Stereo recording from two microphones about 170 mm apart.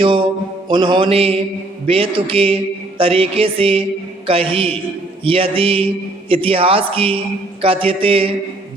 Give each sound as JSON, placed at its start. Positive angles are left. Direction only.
{"t": 0.0, "sound": "music", "side_deg": -30}
{"t": 1.9, "sound": "a man's voice", "side_deg": -35}